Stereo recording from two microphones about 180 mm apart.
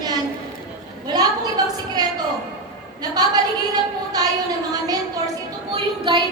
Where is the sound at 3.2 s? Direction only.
20° right (ahead or behind).